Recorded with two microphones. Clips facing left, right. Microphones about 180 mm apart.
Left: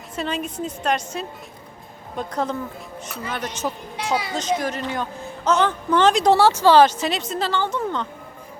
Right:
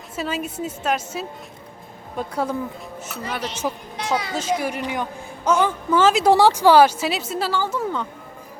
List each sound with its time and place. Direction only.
0.2 s a woman's voice: 5° right (ahead or behind)